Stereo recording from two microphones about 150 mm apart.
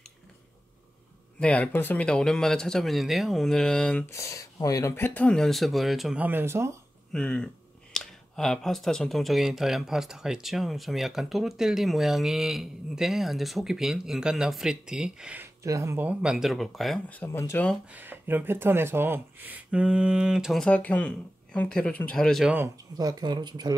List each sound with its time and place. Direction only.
1.4 s speech: 10° left (ahead or behind)
4.0 s speech: 20° left (ahead or behind); by 6.2 s centre (ahead or behind)
6.2 s speech: 15° right (ahead or behind)
7.1 s speech: 5° left (ahead or behind)
17.1 s speech: 15° left (ahead or behind)
17.8 s speech: 10° right (ahead or behind)
20.6 s speech: 10° left (ahead or behind)
22.9 s speech: 25° right (ahead or behind)